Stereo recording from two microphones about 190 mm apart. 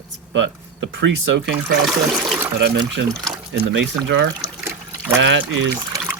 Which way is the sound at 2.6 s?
70° right (ahead or behind).